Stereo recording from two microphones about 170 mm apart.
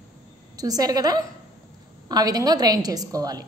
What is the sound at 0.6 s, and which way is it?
A woman's voice, 20° right (ahead or behind).